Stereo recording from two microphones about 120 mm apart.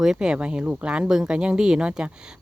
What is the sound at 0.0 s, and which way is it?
Speech, 5° right (ahead or behind).